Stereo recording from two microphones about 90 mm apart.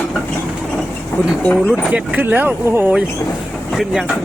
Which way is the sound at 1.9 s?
20° right (ahead or behind).